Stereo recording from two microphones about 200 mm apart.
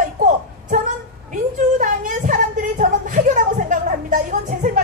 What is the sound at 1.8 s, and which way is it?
Music, 40° right (ahead or behind).